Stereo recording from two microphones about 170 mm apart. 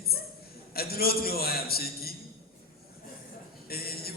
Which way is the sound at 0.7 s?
65° left (ahead or behind).